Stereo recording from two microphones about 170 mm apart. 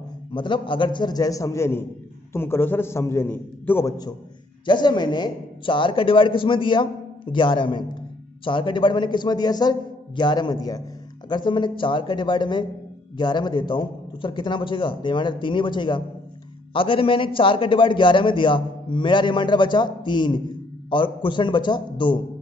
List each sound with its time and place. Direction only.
0.3 s a man's voice: 30° left (ahead or behind); by 3.9 s 10° left (ahead or behind)
4.6 s a man's voice: 25° left (ahead or behind)